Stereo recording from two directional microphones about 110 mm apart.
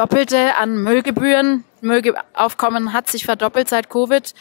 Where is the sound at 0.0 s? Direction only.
20° left (ahead or behind).